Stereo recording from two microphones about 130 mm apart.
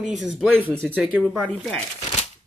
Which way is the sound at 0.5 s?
15° right (ahead or behind).